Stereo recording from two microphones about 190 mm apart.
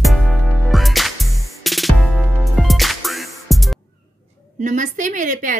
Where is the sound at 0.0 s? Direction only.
Centre (ahead or behind).